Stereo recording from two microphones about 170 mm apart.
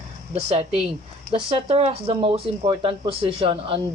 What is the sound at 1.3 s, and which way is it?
Speech, 35° right (ahead or behind).